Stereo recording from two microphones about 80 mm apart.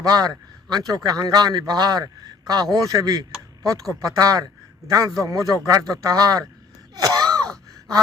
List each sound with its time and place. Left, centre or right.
0.0 s a man's voice: right
6.9 s wail: right